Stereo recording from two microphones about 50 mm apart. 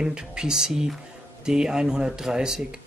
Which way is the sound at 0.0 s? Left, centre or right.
Centre.